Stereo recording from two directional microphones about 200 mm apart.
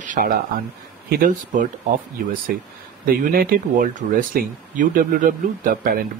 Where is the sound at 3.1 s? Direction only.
45° right (ahead or behind).